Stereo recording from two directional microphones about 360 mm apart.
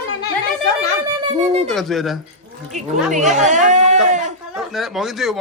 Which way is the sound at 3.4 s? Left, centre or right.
Centre.